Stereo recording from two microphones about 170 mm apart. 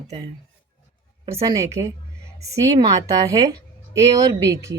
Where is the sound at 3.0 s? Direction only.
20° right (ahead or behind).